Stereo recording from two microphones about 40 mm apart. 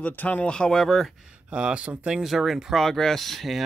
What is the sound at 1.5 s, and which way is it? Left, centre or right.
Speech, right.